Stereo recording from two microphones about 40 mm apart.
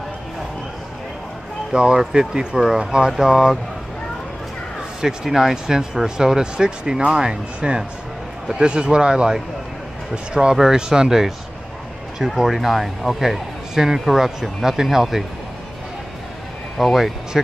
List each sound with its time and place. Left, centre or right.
1.7 s speech: right
3.2 s speech: centre
5.0 s speech: centre
12.4 s speech: centre
16.7 s speech: centre